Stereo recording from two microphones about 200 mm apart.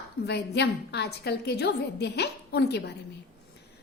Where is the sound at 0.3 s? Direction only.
55° left (ahead or behind).